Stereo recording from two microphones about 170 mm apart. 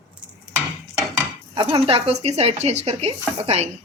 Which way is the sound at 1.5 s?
25° right (ahead or behind).